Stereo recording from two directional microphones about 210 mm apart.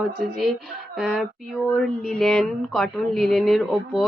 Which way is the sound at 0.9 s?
Centre (ahead or behind).